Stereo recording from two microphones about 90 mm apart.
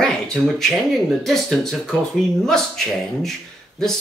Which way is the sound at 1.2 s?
5° left (ahead or behind).